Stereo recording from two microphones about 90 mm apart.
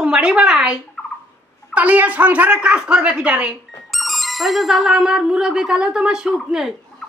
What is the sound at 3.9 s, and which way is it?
Speech, centre (ahead or behind).